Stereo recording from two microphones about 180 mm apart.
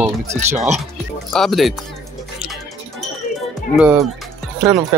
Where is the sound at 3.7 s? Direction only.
10° right (ahead or behind).